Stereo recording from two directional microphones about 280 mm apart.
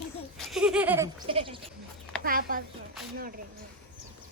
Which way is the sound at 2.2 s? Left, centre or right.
Right.